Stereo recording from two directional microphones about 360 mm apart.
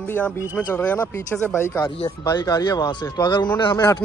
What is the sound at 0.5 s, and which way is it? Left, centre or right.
Speech, centre.